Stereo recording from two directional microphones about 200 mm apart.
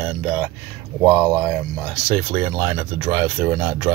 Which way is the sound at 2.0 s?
10° right (ahead or behind).